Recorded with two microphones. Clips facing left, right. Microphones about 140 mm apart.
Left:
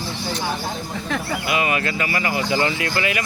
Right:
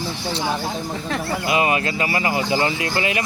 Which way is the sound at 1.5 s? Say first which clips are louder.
Right 3 dB; 30° right (ahead or behind).